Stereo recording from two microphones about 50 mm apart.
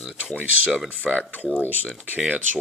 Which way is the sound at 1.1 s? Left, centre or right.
Centre.